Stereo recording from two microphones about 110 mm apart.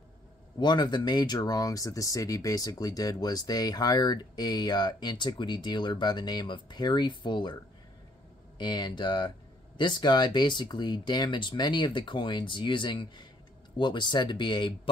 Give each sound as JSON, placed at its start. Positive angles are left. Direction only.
{"t": 0.6, "sound": "speech", "side_deg": 40}
{"t": 8.5, "sound": "speech", "side_deg": 45}